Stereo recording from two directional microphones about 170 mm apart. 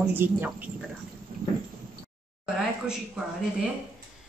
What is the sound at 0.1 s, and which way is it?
Speech, 10° right (ahead or behind).